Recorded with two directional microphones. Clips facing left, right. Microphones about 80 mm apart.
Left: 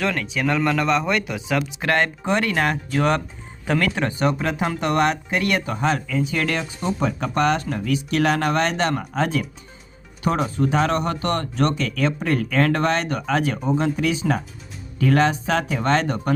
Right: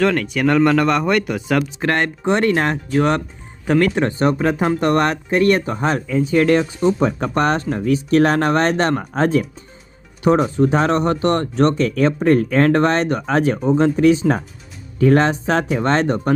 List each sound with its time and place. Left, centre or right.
0.0 s speech: right
1.8 s speech: right